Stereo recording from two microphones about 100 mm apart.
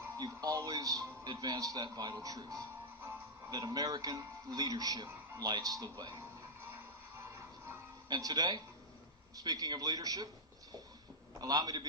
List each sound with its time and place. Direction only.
0.2 s a man's voice: 35° right (ahead or behind)
8.1 s a man's voice: 40° right (ahead or behind)
11.3 s a man's voice: 40° right (ahead or behind)